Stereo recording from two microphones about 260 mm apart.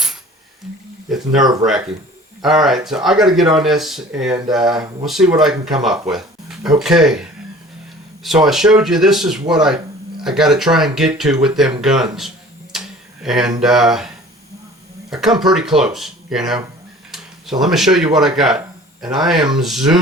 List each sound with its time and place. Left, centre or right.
1.1 s speech: centre
2.4 s speech: centre
12.7 s tick-tock: centre
13.2 s speech: centre
15.1 s speech: centre
19.0 s speech: centre
19.5 s speech: centre